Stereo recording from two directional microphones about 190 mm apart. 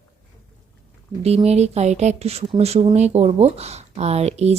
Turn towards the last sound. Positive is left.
turn(degrees=-35)  # may be behind; listen again after turning